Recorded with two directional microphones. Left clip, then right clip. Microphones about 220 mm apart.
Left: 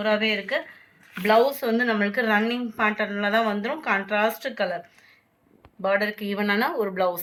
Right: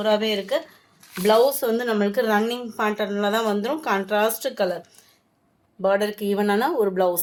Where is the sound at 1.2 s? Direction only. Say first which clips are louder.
Right 2 dB; 55° right (ahead or behind).